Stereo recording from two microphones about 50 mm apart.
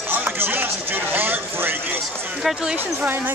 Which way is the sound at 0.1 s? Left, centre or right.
Right.